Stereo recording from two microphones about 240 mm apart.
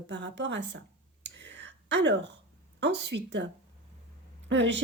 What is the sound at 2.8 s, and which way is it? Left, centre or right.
Speech, right.